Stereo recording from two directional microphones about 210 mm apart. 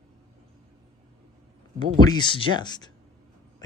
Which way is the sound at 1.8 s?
20° left (ahead or behind).